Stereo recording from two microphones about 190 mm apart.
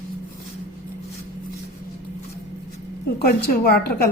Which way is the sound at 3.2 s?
55° left (ahead or behind).